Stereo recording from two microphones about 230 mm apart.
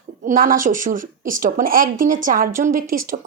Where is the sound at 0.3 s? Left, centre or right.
Right.